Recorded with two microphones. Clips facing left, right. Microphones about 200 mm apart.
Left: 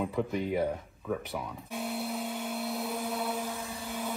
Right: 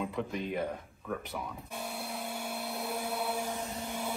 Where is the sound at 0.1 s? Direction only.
5° left (ahead or behind).